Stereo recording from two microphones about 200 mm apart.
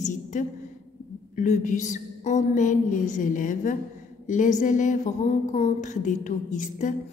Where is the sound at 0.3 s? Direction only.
40° left (ahead or behind).